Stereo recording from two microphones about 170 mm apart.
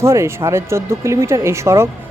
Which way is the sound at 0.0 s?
15° right (ahead or behind).